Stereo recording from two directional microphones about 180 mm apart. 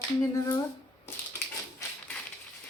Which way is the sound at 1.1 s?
10° left (ahead or behind).